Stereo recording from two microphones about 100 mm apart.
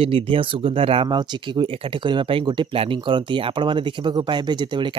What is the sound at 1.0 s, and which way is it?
Speech, 50° right (ahead or behind).